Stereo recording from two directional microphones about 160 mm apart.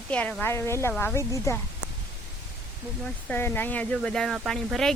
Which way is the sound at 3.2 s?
15° left (ahead or behind).